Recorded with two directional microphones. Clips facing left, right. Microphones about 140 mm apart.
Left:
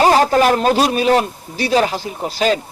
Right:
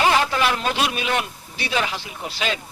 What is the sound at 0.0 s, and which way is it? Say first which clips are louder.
A man's voice: left 7 dB; 40° left (ahead or behind).